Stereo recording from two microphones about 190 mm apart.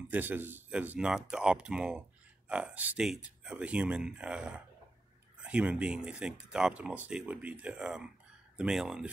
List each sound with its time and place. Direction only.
0.1 s speech: 10° right (ahead or behind)